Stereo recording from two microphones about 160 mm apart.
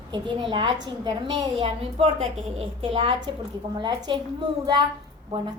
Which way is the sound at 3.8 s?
25° right (ahead or behind).